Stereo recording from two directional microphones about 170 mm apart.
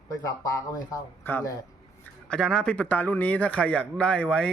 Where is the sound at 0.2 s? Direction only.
20° left (ahead or behind).